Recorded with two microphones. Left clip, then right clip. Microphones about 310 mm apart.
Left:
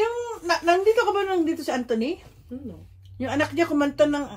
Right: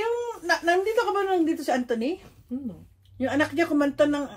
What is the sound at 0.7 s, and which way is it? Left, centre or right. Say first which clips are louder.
A woman's voice: left 5 dB; centre.